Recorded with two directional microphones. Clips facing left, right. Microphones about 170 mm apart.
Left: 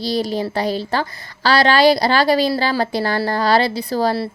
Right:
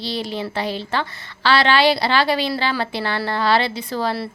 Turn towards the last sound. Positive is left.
turn(degrees=40)  # may be behind; listen again after turning